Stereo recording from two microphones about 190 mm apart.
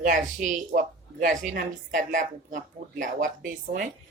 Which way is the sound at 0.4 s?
40° right (ahead or behind).